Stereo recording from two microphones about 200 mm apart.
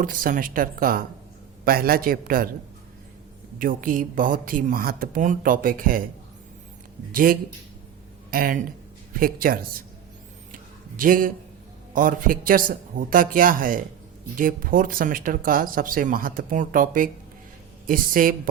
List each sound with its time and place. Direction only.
0.0 s speech: 45° right (ahead or behind)
3.6 s speech: 45° right (ahead or behind)
7.1 s speech: 45° right (ahead or behind)
10.5 s a sound: 45° right (ahead or behind)
11.9 s speech: 45° right (ahead or behind)